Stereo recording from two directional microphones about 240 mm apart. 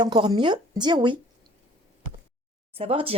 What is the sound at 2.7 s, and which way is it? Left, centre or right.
Speech, right.